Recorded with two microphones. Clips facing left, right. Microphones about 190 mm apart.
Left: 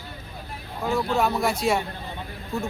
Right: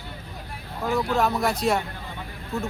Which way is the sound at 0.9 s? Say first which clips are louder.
Even; centre (ahead or behind).